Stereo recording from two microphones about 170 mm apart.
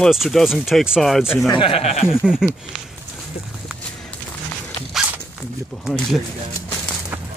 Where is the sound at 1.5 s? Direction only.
30° left (ahead or behind).